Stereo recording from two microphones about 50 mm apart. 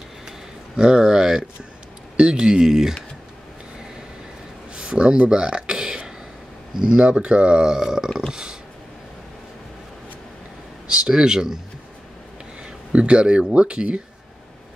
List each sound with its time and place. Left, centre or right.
0.7 s speech: centre
4.7 s a sound: centre
6.8 s speech: centre
8.3 s burping: centre
10.9 s speech: centre
12.9 s speech: right